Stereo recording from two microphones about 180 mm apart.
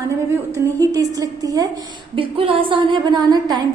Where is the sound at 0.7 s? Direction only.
20° right (ahead or behind).